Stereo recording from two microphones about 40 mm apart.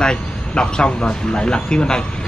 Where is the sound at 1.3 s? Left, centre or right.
Left.